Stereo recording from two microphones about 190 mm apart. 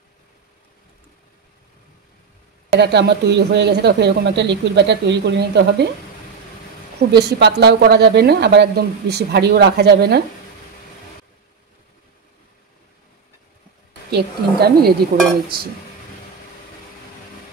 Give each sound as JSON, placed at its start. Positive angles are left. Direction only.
{"t": 2.8, "sound": "speech", "side_deg": -60}
{"t": 7.0, "sound": "speech", "side_deg": -60}
{"t": 14.1, "sound": "speech", "side_deg": -55}